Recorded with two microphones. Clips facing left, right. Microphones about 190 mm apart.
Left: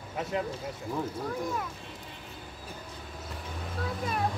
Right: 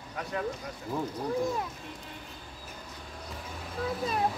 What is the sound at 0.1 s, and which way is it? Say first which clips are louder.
Speech: left 3 dB; 20° left (ahead or behind).